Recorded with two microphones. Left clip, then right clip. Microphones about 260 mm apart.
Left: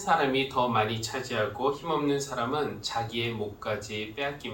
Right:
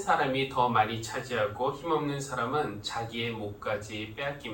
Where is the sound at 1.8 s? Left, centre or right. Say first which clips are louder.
Left 2 dB; left.